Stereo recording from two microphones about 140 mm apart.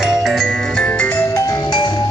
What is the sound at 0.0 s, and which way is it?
Music, centre (ahead or behind).